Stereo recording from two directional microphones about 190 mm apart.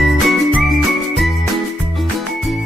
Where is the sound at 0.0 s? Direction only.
Centre (ahead or behind).